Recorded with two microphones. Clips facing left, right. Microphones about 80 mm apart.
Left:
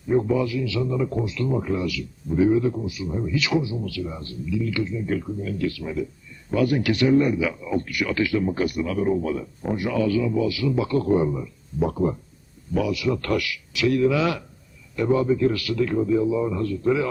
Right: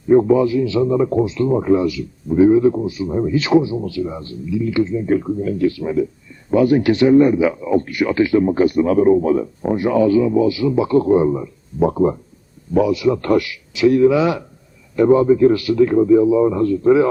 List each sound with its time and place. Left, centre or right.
0.1 s a man's voice: right